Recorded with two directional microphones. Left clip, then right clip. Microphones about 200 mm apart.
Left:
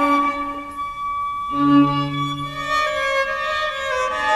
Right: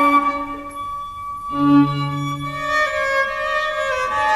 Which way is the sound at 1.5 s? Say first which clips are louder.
Right 1 dB; 30° right (ahead or behind).